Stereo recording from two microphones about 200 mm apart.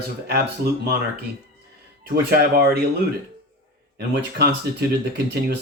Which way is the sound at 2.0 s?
50° right (ahead or behind).